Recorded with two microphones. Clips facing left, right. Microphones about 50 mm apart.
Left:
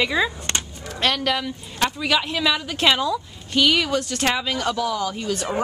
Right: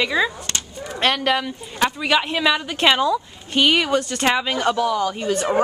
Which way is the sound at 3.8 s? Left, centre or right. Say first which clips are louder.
Right 3 dB; centre.